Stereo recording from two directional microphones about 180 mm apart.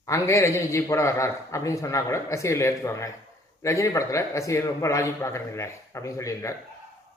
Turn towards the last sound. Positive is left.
turn(degrees=15)  # may be behind; listen again after turning